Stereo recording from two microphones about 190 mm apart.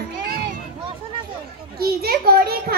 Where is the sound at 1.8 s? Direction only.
55° right (ahead or behind).